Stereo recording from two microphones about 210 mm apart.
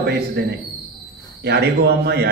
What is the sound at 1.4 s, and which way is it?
Speech, 50° right (ahead or behind).